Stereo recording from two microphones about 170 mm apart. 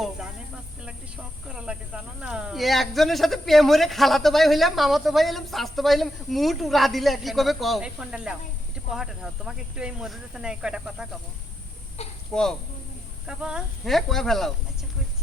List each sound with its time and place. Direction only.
0.8 s a man's voice: 5° right (ahead or behind)
12.0 s speech: 40° left (ahead or behind)
12.3 s a man's voice: 5° left (ahead or behind)